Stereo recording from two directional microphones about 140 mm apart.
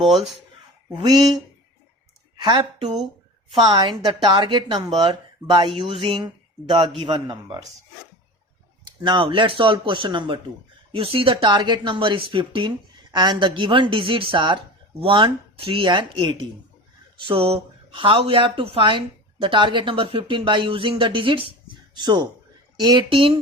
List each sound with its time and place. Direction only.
0.9 s speech: 30° right (ahead or behind)
3.5 s speech: 35° right (ahead or behind)
8.8 s speech: 35° right (ahead or behind)